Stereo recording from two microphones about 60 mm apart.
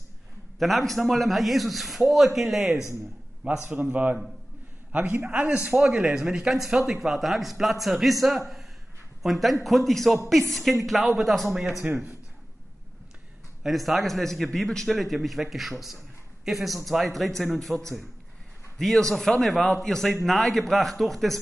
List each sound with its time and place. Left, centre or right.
0.6 s speech: centre
3.4 s a man's voice: right
5.2 s a man's voice: right
5.7 s speech: centre
11.8 s a man's voice: right
13.6 s speech: centre